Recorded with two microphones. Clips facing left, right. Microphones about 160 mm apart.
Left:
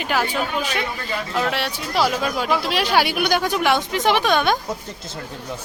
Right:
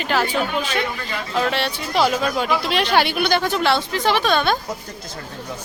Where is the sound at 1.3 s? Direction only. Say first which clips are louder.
Right 3 dB; 5° left (ahead or behind).